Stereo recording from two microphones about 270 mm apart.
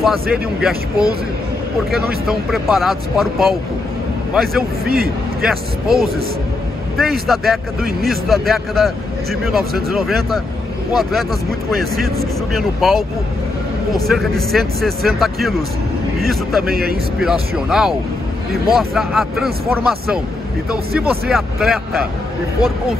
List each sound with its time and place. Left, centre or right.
0.0 s a man's voice: centre
2.2 s a man's voice: centre
4.8 s a man's voice: right
5.4 s a man's voice: centre
14.0 s a man's voice: centre
16.7 s a man's voice: right
17.2 s a man's voice: centre
21.3 s a man's voice: centre